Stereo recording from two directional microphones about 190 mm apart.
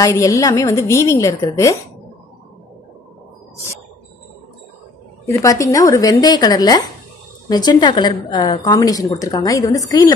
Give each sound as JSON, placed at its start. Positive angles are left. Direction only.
{"t": 0.0, "sound": "a woman's voice", "side_deg": 15}
{"t": 5.2, "sound": "a woman's voice", "side_deg": 15}